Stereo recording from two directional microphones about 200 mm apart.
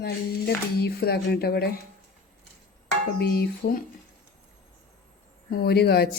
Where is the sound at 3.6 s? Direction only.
55° left (ahead or behind).